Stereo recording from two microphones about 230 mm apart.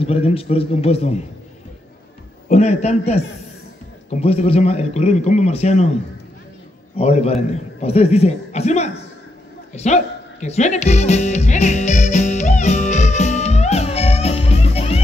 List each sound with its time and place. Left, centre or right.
0.0 s a man's voice: left
2.4 s a man's voice: left
7.0 s a man's voice: left
9.8 s music: left